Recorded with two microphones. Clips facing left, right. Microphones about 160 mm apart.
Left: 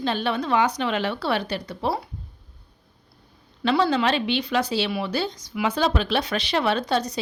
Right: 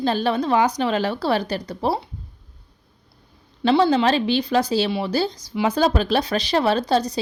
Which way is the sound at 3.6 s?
30° right (ahead or behind).